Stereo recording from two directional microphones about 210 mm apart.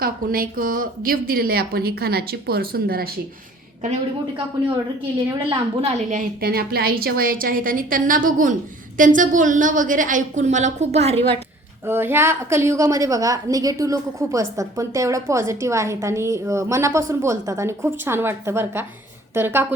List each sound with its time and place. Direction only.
0.0 s a woman's voice: 45° right (ahead or behind)
5.3 s a woman's voice: 30° right (ahead or behind)
11.9 s a woman's voice: 10° right (ahead or behind)